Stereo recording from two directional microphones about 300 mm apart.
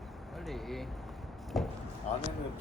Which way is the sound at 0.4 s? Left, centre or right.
Centre.